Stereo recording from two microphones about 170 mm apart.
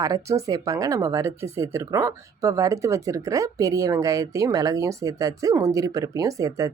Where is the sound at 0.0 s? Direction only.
20° right (ahead or behind).